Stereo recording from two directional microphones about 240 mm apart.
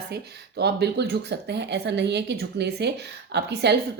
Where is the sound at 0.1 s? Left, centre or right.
Right.